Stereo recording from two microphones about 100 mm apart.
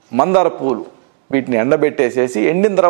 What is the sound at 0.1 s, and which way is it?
Speech, 15° right (ahead or behind).